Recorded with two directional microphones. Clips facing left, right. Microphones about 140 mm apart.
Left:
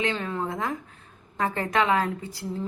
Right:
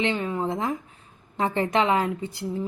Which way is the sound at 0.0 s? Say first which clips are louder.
Right 3 dB; 20° right (ahead or behind).